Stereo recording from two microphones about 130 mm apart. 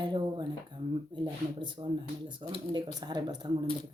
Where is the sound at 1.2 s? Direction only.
35° right (ahead or behind).